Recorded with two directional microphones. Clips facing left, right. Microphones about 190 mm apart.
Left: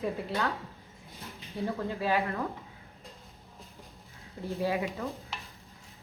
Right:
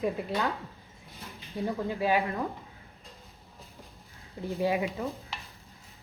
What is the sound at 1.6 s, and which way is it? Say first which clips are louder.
Speech: right 2 dB; 15° right (ahead or behind).